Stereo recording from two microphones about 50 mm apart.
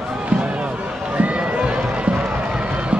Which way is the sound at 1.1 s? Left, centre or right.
Right.